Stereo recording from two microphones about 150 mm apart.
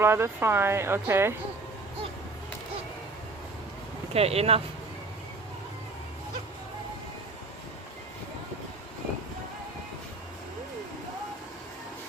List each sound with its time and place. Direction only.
0.0 s speech: 15° right (ahead or behind)
4.1 s speech: 40° right (ahead or behind)